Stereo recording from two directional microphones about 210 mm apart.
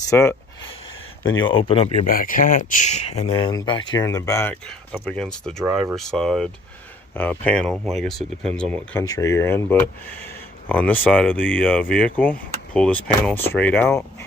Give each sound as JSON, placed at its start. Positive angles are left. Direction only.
{"t": 0.1, "sound": "speech", "side_deg": 15}
{"t": 1.6, "sound": "speech", "side_deg": 30}
{"t": 2.0, "sound": "speech", "side_deg": 40}
{"t": 3.3, "sound": "speech", "side_deg": 20}